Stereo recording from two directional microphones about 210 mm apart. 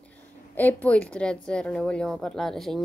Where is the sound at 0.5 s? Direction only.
5° left (ahead or behind).